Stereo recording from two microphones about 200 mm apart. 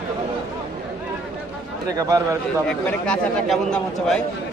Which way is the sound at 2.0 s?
15° right (ahead or behind).